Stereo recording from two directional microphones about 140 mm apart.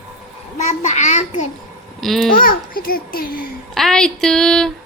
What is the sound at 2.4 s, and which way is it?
A child's voice, 90° left.